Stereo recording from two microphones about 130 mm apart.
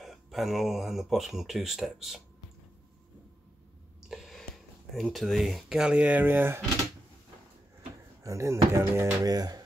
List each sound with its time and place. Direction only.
0.0 s speech: centre (ahead or behind)
4.1 s speech: centre (ahead or behind); by 6.6 s 15° right (ahead or behind)
8.2 s speech: 25° right (ahead or behind)